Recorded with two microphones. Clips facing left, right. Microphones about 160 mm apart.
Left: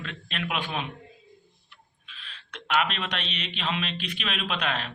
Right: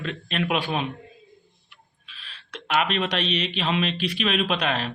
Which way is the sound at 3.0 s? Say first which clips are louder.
Right 8 dB; 35° right (ahead or behind).